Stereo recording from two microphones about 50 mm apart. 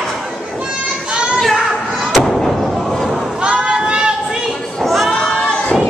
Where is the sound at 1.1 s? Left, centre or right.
Right.